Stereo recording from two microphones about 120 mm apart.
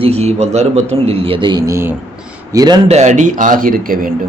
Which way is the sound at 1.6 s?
20° right (ahead or behind).